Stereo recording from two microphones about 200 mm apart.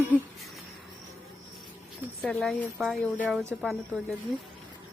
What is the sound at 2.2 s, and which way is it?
Speech, 5° left (ahead or behind).